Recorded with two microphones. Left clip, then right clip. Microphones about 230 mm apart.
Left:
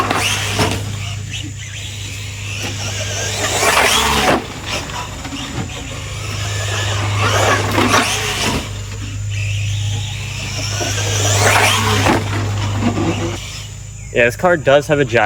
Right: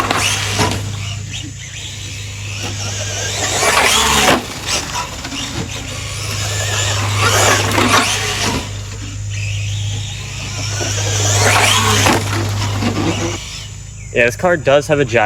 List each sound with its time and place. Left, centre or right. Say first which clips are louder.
0.0 s a sound: right 1 dB; centre
2.6 s a sound: right 1 dB; left; by 4.0 s centre
4.6 s a sound: right 3 dB; right
6.3 s neigh: right 2 dB; right
7.9 s vehicle: right 1 dB; centre
10.6 s vehicle: even; left; by 11.7 s centre
11.9 s music: right 2 dB; right
12.1 s vehicle: right 1 dB; right
14.1 s speech: even; centre